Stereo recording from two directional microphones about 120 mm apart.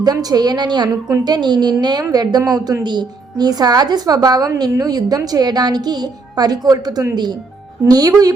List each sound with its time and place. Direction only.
0.0 s a woman's voice: 30° right (ahead or behind)